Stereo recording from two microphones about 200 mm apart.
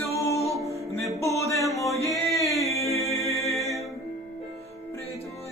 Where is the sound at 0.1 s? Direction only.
15° left (ahead or behind).